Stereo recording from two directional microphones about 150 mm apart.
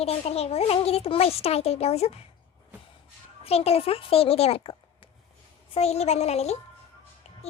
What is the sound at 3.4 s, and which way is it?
A child's voice, 40° left (ahead or behind).